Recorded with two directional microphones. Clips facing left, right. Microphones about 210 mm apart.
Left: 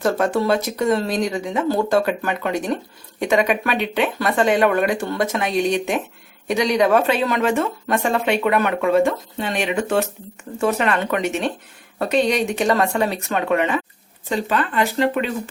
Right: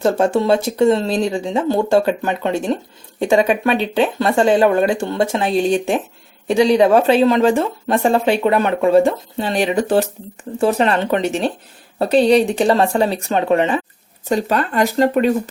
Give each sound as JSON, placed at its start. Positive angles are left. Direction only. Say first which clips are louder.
{"t": 0.2, "sound": "speech", "louder": "right 4 dB", "side_deg": -25}
{"t": 14.3, "sound": "speech", "louder": "right 4 dB", "side_deg": -40}